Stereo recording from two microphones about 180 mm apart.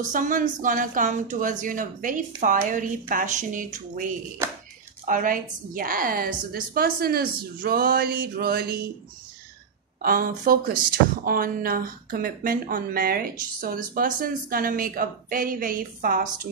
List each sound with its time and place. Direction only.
0.1 s speech: 45° right (ahead or behind)
5.0 s a woman's voice: 50° right (ahead or behind)
10.0 s speech: 50° right (ahead or behind)